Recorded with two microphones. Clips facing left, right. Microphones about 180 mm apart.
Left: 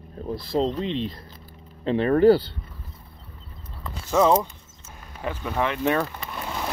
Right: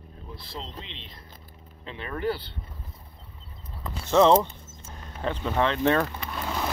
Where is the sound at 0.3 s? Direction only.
45° left (ahead or behind).